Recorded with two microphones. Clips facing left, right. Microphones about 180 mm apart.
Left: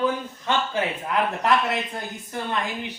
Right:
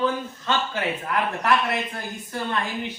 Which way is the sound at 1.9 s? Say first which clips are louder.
Even; 20° left (ahead or behind).